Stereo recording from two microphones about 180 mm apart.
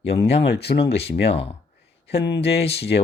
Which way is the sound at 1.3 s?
35° left (ahead or behind).